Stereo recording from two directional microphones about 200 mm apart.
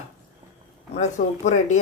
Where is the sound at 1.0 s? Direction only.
35° left (ahead or behind).